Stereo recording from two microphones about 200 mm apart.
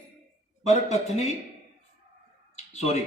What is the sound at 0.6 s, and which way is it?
Speech, 35° left (ahead or behind).